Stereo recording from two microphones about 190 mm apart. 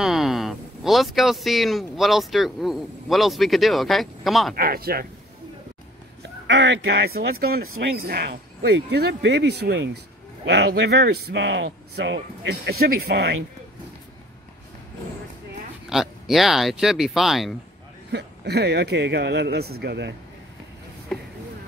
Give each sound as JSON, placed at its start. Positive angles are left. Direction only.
{"t": 0.0, "sound": "speech", "side_deg": 0}
{"t": 4.6, "sound": "speech", "side_deg": -50}
{"t": 6.4, "sound": "speech", "side_deg": -70}
{"t": 15.9, "sound": "speech", "side_deg": 0}
{"t": 18.1, "sound": "speech", "side_deg": -60}